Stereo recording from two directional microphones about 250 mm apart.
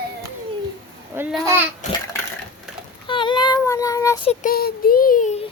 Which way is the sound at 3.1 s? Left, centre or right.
Centre.